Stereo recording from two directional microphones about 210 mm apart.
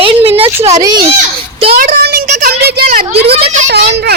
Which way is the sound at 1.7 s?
45° right (ahead or behind).